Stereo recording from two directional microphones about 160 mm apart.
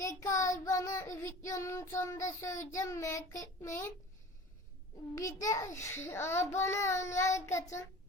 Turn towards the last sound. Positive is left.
turn(degrees=20)  # may be behind; listen again after turning